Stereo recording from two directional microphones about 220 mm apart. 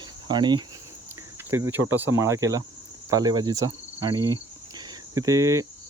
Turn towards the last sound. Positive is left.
turn(degrees=-15)  # may be behind; listen again after turning